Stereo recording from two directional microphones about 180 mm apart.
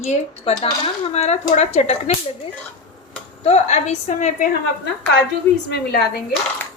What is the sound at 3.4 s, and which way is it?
Speech, 40° left (ahead or behind).